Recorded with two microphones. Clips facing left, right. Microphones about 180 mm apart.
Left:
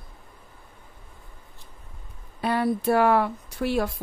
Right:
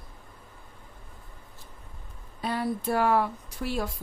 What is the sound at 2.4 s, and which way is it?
Speech, 65° left (ahead or behind).